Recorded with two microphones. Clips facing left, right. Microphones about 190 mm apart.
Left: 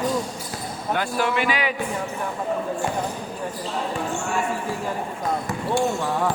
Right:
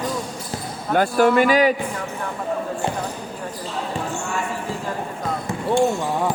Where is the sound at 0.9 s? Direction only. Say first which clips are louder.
Right 8 dB; 45° right (ahead or behind).